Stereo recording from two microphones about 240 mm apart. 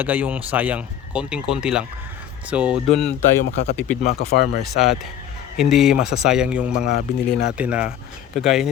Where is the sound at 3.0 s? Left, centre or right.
Left.